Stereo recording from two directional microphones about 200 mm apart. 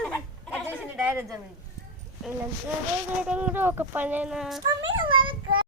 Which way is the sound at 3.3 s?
5° right (ahead or behind).